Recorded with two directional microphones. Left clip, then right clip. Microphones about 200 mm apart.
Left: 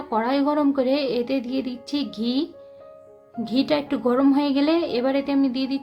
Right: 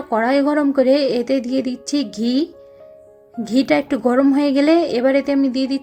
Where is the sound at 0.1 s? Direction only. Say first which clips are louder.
Right 5 dB; 25° right (ahead or behind).